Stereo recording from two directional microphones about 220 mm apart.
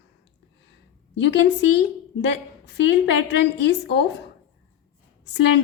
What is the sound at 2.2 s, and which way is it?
A woman's voice, 50° left (ahead or behind).